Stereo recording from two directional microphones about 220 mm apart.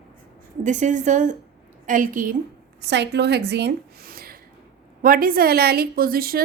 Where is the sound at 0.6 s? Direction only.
35° right (ahead or behind).